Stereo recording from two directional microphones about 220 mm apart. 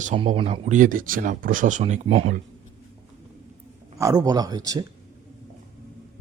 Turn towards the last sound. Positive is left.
turn(degrees=-15)  # may be behind; listen again after turning